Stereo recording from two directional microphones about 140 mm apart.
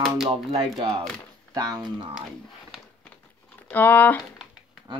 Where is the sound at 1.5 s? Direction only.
25° right (ahead or behind).